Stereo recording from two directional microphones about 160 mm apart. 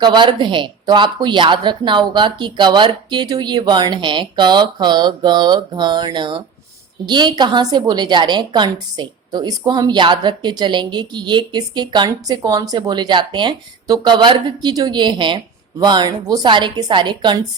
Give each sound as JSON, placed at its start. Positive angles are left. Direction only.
{"t": 0.0, "sound": "a woman's voice", "side_deg": -30}